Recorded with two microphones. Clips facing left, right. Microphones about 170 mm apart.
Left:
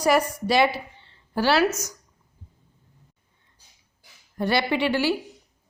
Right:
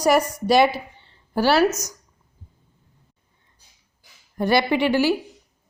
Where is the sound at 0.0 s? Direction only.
40° right (ahead or behind).